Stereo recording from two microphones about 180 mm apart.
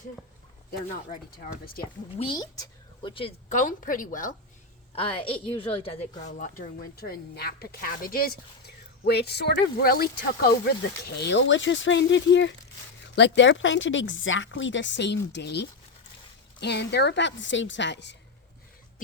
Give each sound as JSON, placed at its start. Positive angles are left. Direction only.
{"t": 1.4, "sound": "speech", "side_deg": 55}
{"t": 2.1, "sound": "speech", "side_deg": 25}
{"t": 3.5, "sound": "a woman's voice", "side_deg": 45}
{"t": 4.9, "sound": "a woman's voice", "side_deg": 30}
{"t": 6.2, "sound": "a woman's voice", "side_deg": 45}